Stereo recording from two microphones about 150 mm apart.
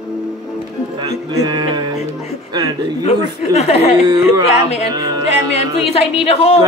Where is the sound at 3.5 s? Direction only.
45° left (ahead or behind).